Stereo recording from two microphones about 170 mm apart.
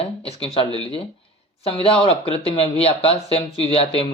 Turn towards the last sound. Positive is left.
turn(degrees=35)  # may be behind; listen again after turning